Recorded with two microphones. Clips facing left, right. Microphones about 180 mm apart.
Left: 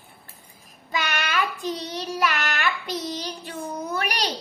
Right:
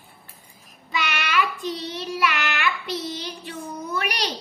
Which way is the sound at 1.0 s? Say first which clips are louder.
Right 1 dB; 45° left (ahead or behind).